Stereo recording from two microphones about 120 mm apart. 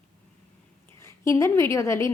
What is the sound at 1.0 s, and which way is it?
A woman's voice, 20° left (ahead or behind).